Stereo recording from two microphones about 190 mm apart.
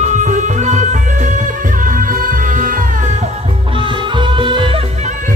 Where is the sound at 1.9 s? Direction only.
45° right (ahead or behind).